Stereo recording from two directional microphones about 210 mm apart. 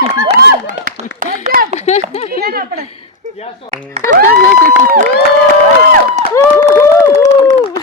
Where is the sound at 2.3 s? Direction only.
45° right (ahead or behind).